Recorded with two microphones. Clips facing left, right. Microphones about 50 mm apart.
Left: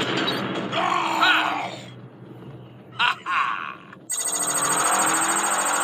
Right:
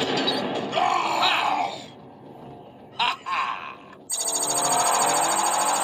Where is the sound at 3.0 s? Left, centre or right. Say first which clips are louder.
Left 3 dB; left.